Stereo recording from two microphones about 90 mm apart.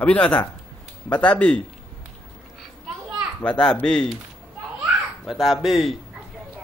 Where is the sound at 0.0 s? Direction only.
15° left (ahead or behind).